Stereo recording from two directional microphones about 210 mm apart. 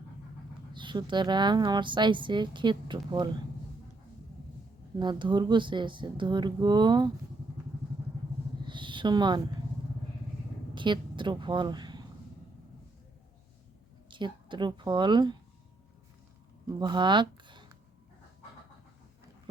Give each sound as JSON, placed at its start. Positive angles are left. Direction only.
{"t": 0.7, "sound": "a woman's voice", "side_deg": -20}
{"t": 4.9, "sound": "a woman's voice", "side_deg": -20}
{"t": 8.6, "sound": "a sound", "side_deg": -20}
{"t": 10.8, "sound": "speech", "side_deg": -20}
{"t": 14.1, "sound": "a woman's voice", "side_deg": -20}
{"t": 16.6, "sound": "speech", "side_deg": -20}